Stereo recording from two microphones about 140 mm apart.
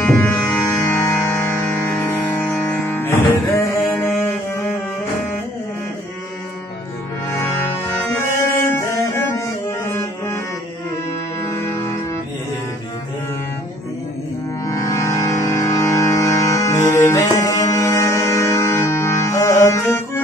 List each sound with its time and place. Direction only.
0.0 s music: 15° left (ahead or behind)
3.9 s music: 5° left (ahead or behind)
7.2 s music: 20° left (ahead or behind)
8.5 s music: 20° left (ahead or behind)
11.4 s music: 20° left (ahead or behind)
14.7 s music: 20° left (ahead or behind)